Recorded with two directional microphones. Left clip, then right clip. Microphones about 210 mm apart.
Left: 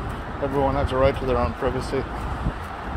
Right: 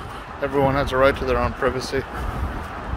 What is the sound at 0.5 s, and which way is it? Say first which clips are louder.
Speech: right 3 dB; 25° right (ahead or behind).